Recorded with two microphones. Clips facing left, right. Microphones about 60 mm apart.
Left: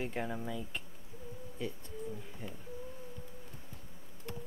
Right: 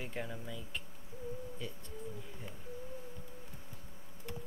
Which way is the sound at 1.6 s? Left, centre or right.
Centre.